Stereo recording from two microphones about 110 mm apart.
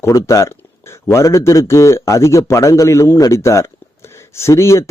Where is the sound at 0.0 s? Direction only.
25° left (ahead or behind).